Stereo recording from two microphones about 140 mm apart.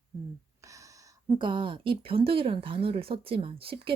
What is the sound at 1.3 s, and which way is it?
Speech, 35° right (ahead or behind).